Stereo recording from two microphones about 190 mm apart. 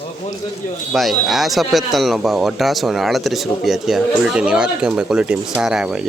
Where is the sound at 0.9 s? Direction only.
Centre (ahead or behind).